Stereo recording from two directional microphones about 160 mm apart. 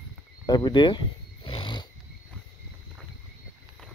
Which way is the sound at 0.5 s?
30° left (ahead or behind).